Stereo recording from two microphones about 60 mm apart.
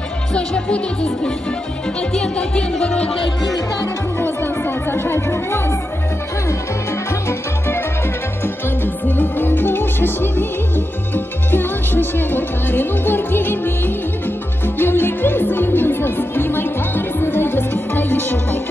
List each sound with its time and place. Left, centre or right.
0.3 s music: centre
4.2 s music: left
7.2 s music: left
9.0 s music: left